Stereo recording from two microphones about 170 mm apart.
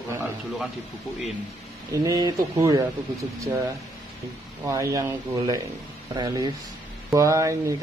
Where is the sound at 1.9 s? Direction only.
20° right (ahead or behind).